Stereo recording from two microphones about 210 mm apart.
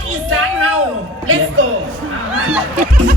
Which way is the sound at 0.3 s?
75° right (ahead or behind).